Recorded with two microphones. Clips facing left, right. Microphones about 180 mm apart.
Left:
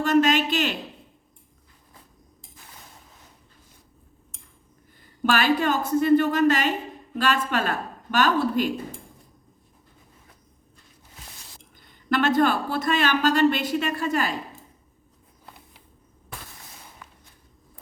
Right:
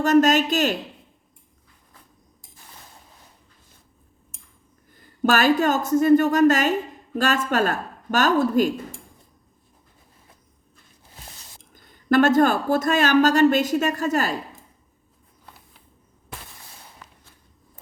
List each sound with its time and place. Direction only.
0.0 s speech: 45° right (ahead or behind)
5.2 s speech: 45° right (ahead or behind)
11.7 s speech: 45° right (ahead or behind)